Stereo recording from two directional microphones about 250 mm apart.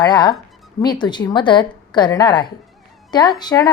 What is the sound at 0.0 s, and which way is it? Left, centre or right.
A woman's voice, centre.